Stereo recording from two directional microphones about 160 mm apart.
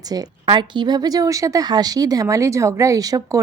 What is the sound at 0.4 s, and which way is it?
Speech, 30° right (ahead or behind).